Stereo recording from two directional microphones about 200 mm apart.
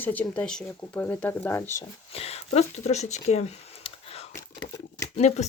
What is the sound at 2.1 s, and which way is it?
Speech, 30° left (ahead or behind).